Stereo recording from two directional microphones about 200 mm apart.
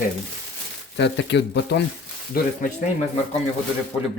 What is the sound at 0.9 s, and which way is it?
Speech, 60° left (ahead or behind).